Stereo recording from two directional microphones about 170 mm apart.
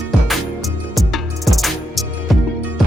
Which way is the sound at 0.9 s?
Centre (ahead or behind).